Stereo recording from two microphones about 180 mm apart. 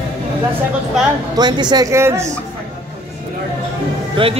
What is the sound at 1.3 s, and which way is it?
Speech, 25° right (ahead or behind).